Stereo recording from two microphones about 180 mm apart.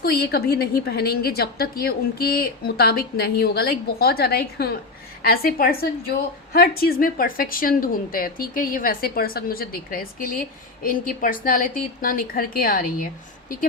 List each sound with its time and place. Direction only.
0.0 s a woman's voice: 60° left (ahead or behind)